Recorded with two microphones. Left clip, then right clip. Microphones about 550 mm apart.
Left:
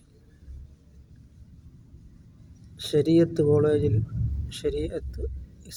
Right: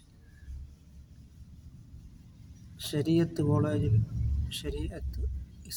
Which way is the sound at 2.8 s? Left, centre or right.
Right.